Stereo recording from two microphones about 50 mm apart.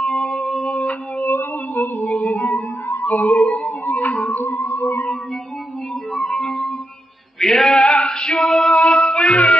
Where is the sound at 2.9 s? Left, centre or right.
Left.